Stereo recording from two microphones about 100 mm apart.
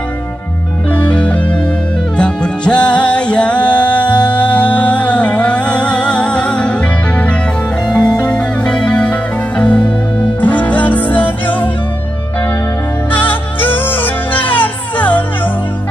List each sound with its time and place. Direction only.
0.8 s music: 15° left (ahead or behind)
13.1 s music: 20° left (ahead or behind)